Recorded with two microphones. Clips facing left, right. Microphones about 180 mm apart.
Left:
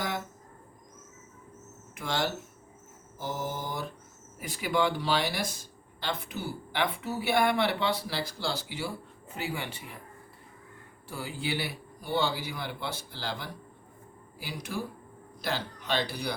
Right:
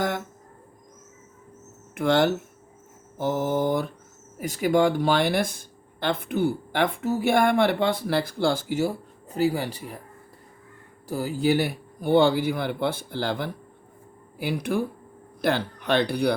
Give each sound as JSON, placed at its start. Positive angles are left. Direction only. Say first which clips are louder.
{"t": 2.0, "sound": "mantra", "louder": "right 11 dB", "side_deg": -55}
{"t": 4.4, "sound": "speech", "louder": "right 8 dB", "side_deg": -45}
{"t": 11.1, "sound": "speech", "louder": "right 11 dB", "side_deg": -40}
{"t": 14.3, "sound": "mantra", "louder": "right 11 dB", "side_deg": -55}
{"t": 15.4, "sound": "speech", "louder": "right 9 dB", "side_deg": -55}